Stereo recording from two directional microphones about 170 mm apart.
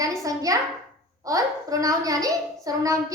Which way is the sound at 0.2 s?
20° right (ahead or behind).